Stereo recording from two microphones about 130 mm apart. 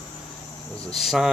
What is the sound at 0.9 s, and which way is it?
Speech, centre (ahead or behind).